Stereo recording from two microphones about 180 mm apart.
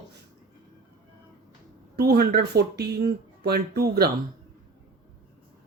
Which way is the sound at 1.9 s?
60° right (ahead or behind).